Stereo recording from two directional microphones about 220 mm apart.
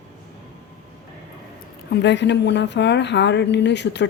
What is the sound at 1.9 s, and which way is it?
A woman's voice, 55° left (ahead or behind).